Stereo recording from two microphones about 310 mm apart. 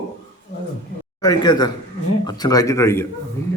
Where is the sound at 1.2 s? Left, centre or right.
Centre.